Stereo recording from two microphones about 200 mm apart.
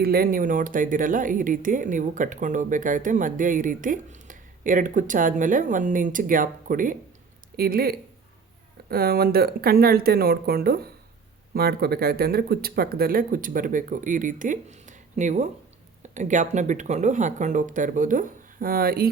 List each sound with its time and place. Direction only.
0.0 s speech: 50° right (ahead or behind)